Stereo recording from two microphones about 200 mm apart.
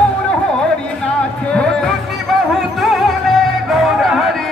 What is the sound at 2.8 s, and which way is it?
Music, centre (ahead or behind).